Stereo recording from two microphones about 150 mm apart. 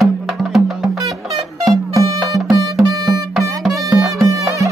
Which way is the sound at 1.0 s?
Centre (ahead or behind).